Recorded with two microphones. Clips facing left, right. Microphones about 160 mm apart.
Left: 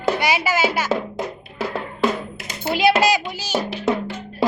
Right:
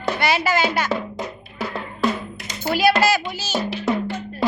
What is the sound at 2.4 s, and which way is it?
Drum, centre (ahead or behind).